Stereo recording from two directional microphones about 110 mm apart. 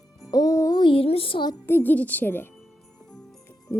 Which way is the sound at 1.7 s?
20° left (ahead or behind).